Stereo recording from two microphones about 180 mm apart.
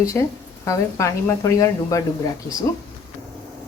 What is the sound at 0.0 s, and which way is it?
Speech, 15° left (ahead or behind).